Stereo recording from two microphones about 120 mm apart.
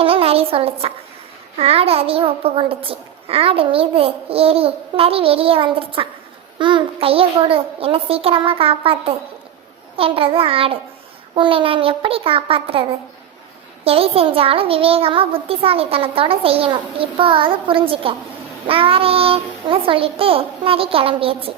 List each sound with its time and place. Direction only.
0.0 s a child's voice: 50° right (ahead or behind)